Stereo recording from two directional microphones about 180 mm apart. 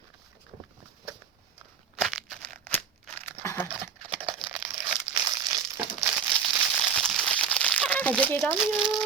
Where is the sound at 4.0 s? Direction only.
30° right (ahead or behind).